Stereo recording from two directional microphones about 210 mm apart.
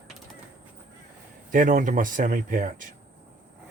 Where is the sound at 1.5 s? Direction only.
40° right (ahead or behind).